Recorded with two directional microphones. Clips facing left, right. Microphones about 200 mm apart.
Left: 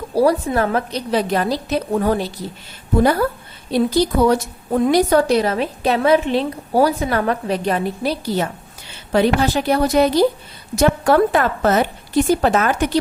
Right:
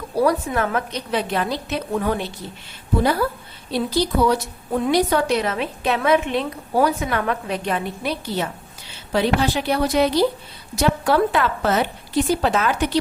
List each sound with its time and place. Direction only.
0.2 s a woman's voice: 35° left (ahead or behind)
3.0 s a woman's voice: 50° left (ahead or behind)